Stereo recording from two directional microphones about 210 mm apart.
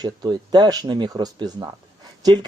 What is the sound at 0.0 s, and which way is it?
Speech, 20° right (ahead or behind).